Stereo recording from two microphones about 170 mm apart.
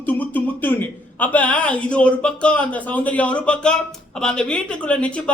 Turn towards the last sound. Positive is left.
turn(degrees=5)  # may be behind; listen again after turning